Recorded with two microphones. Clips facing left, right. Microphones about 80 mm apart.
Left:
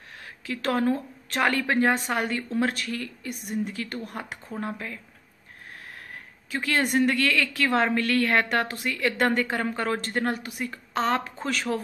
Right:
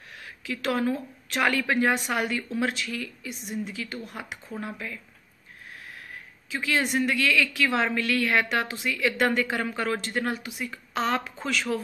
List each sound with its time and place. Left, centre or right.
0.5 s a woman's voice: left
6.5 s a woman's voice: left